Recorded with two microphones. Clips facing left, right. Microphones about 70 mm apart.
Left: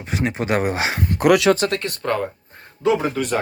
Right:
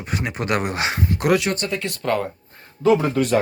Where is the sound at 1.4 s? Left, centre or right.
Left.